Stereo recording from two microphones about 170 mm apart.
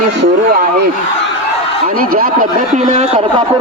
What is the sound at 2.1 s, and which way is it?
Speech, 55° right (ahead or behind).